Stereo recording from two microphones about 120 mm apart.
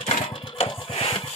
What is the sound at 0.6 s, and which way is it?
Music, 50° left (ahead or behind).